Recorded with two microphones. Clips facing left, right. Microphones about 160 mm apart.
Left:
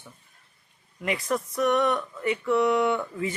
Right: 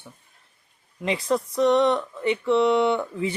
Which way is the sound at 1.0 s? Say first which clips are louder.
Right 4 dB; 20° right (ahead or behind).